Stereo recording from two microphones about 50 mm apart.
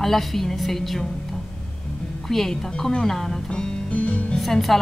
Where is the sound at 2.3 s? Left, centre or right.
Centre.